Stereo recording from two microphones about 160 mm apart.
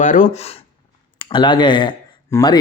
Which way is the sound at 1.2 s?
30° left (ahead or behind).